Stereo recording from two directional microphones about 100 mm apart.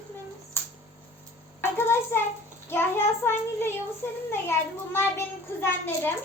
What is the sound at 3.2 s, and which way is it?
A child's voice, 25° left (ahead or behind).